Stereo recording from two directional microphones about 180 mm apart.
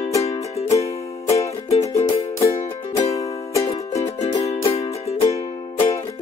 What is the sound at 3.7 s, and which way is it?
Music, 35° left (ahead or behind).